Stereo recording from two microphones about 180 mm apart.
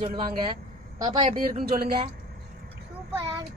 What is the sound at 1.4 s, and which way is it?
Speech, 55° right (ahead or behind).